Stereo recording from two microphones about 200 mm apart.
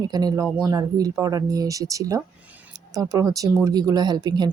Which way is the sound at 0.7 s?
20° right (ahead or behind).